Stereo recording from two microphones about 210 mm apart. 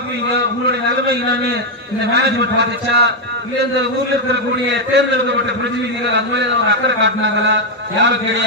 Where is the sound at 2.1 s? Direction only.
55° right (ahead or behind).